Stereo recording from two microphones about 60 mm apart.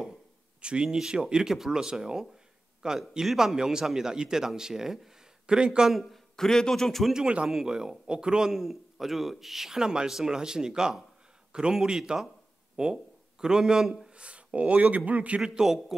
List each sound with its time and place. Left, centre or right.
0.6 s a man's voice: centre
5.9 s a man's voice: centre
7.2 s a man's voice: centre